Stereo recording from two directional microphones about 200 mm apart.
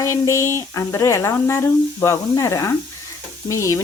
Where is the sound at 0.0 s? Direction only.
15° left (ahead or behind).